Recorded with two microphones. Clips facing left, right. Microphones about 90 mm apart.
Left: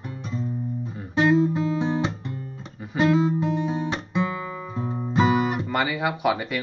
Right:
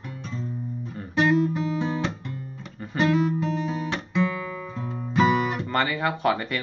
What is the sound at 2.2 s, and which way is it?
Music, 25° left (ahead or behind).